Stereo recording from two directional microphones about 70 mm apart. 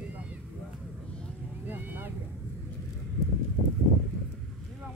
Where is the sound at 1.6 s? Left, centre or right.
Right.